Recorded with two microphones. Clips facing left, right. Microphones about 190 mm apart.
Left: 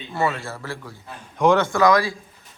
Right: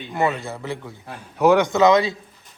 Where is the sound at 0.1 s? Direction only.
20° right (ahead or behind).